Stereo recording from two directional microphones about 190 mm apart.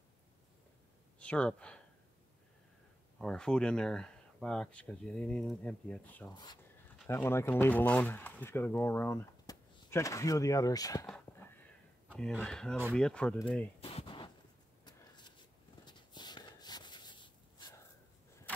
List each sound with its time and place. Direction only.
1.2 s speech: 5° left (ahead or behind)
3.2 s speech: 5° left (ahead or behind)
6.3 s speech: 20° left (ahead or behind)
11.1 s cat: 10° left (ahead or behind)
12.2 s speech: 5° left (ahead or behind)
13.7 s a sound: 30° left (ahead or behind)